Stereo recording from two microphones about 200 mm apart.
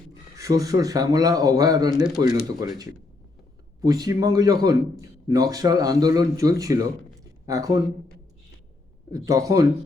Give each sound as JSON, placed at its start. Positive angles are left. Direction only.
{"t": 0.1, "sound": "a man's voice", "side_deg": -15}
{"t": 9.1, "sound": "a man's voice", "side_deg": -15}